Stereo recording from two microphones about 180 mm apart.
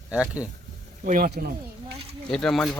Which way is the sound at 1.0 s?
50° right (ahead or behind).